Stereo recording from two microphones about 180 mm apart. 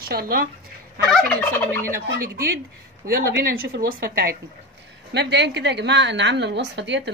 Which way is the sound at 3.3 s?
65° right (ahead or behind).